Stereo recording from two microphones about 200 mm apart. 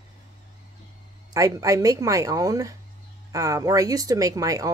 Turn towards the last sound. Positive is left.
turn(degrees=-15)  # may be behind; listen again after turning